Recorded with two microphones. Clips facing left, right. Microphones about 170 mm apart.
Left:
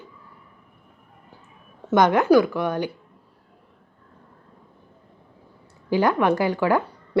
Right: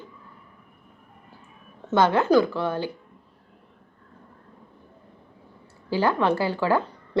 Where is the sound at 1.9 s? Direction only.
15° left (ahead or behind).